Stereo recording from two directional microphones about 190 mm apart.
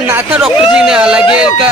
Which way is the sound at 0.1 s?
10° right (ahead or behind).